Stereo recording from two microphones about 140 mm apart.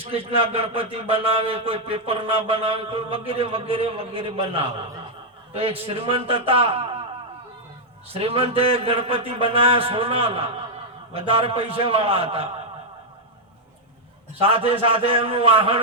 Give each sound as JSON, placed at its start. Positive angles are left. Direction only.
{"t": 0.0, "sound": "speech", "side_deg": -45}
{"t": 8.2, "sound": "speech", "side_deg": -45}
{"t": 14.5, "sound": "speech", "side_deg": -40}